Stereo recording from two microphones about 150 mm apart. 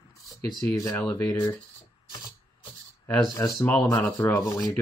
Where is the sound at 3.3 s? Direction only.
25° left (ahead or behind).